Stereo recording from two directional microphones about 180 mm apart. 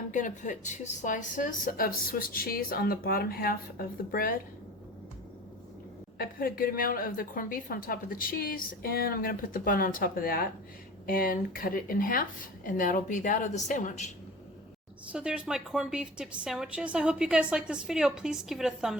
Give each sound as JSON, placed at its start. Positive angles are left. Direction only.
{"t": 0.1, "sound": "a woman's voice", "side_deg": 45}
{"t": 6.1, "sound": "a woman's voice", "side_deg": 55}
{"t": 15.1, "sound": "a woman's voice", "side_deg": -5}